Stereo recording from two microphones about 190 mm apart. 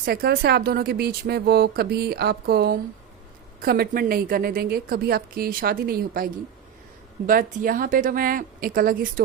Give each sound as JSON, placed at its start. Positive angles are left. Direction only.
{"t": 0.0, "sound": "a woman's voice", "side_deg": -55}